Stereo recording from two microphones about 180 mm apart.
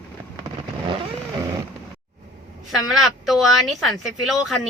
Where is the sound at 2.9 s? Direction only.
Centre (ahead or behind).